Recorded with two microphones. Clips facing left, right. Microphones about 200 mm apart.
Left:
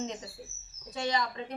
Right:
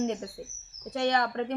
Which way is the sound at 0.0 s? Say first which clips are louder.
Right 7 dB; 55° right (ahead or behind).